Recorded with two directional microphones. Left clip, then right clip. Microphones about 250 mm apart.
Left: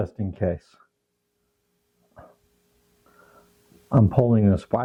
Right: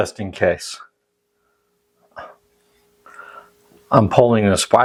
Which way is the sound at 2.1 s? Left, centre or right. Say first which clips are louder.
Right 13 dB; centre.